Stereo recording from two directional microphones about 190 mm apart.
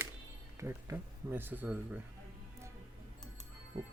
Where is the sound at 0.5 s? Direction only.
15° right (ahead or behind).